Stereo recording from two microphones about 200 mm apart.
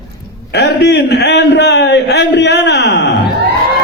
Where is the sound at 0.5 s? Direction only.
55° left (ahead or behind).